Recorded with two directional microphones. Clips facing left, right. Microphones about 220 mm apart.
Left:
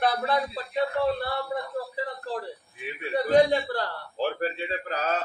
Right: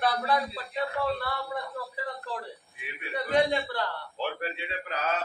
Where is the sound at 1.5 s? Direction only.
30° left (ahead or behind).